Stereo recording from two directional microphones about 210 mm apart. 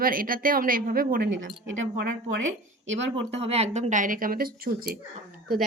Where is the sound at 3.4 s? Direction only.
30° right (ahead or behind).